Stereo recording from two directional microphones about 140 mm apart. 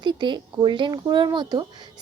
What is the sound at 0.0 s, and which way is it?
A woman's voice, 35° right (ahead or behind).